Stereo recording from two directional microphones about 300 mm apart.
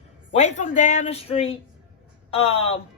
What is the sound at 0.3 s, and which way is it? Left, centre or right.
Speech, left.